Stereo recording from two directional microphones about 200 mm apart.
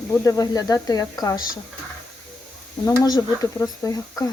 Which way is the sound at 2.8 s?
20° left (ahead or behind).